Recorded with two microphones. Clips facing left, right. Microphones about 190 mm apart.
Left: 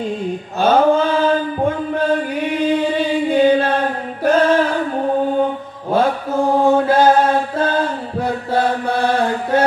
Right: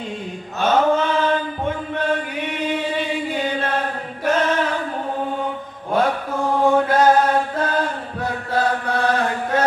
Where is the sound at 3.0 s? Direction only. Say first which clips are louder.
Left 8 dB; 30° left (ahead or behind).